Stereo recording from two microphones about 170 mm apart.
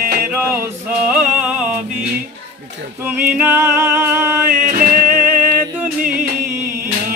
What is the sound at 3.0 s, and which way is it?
Music, 10° right (ahead or behind).